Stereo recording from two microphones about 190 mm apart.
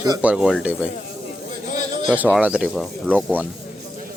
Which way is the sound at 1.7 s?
40° left (ahead or behind).